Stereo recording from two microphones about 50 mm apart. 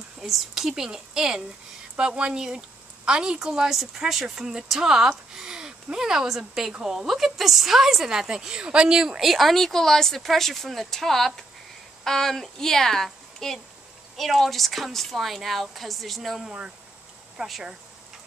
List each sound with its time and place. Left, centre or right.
0.2 s a woman's voice: centre
9.3 s a woman's voice: centre